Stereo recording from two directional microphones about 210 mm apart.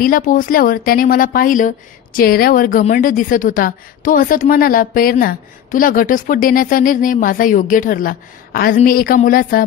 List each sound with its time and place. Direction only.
0.0 s a woman's voice: 40° left (ahead or behind)